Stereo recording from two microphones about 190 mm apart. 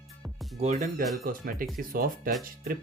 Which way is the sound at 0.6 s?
40° right (ahead or behind).